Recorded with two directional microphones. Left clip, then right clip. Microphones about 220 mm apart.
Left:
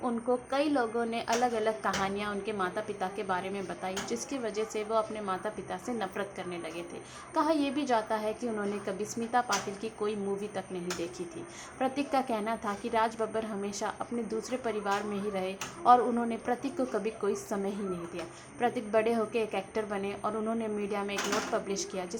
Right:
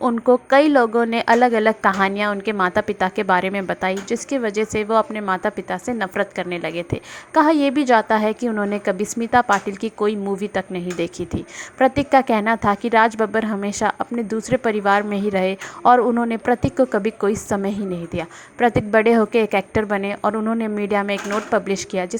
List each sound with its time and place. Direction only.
0.0 s a woman's voice: 40° right (ahead or behind)